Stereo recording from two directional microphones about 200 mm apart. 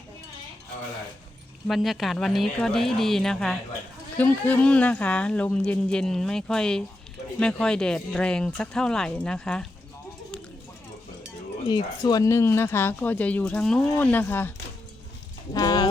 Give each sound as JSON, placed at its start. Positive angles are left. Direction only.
{"t": 1.6, "sound": "speech", "side_deg": 0}
{"t": 11.7, "sound": "speech", "side_deg": 20}
{"t": 15.5, "sound": "horse", "side_deg": 20}